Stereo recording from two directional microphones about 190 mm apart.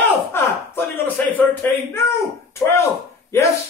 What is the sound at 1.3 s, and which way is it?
Speech, 10° left (ahead or behind).